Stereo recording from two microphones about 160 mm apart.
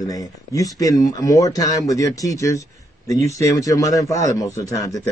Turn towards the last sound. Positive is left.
turn(degrees=20)  # may be behind; listen again after turning